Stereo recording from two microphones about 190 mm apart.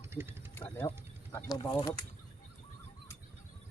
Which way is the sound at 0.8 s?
20° left (ahead or behind).